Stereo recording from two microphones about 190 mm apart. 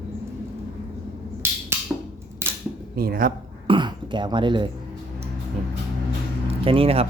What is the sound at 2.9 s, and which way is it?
Speech, 50° right (ahead or behind).